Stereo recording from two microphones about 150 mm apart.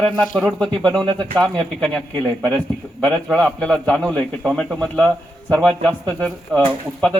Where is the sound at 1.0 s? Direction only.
30° right (ahead or behind).